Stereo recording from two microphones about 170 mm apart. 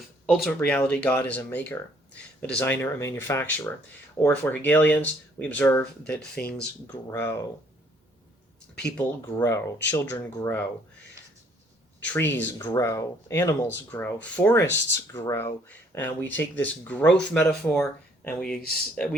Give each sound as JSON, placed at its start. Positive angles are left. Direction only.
{"t": 0.3, "sound": "speech", "side_deg": 0}
{"t": 8.7, "sound": "speech", "side_deg": 5}
{"t": 9.4, "sound": "speech", "side_deg": 15}
{"t": 11.9, "sound": "speech", "side_deg": 10}